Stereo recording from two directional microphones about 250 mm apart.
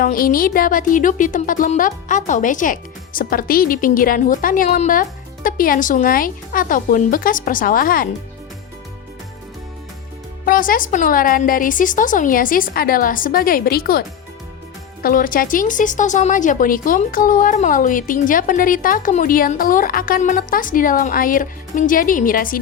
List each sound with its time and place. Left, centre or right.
0.0 s speech: left
10.4 s speech: left
15.0 s speech: left